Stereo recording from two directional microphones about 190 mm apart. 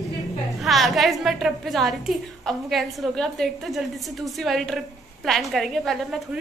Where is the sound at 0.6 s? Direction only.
Centre (ahead or behind).